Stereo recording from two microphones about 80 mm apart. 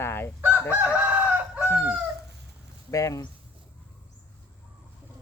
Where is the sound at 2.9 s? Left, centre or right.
Left.